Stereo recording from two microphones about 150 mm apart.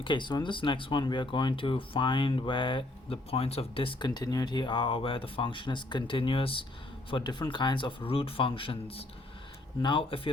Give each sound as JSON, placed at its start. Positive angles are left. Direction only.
{"t": 0.0, "sound": "speech", "side_deg": 30}